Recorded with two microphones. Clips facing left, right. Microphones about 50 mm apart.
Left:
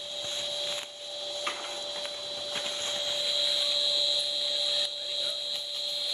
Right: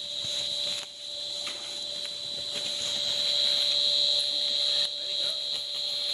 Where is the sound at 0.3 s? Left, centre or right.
Left.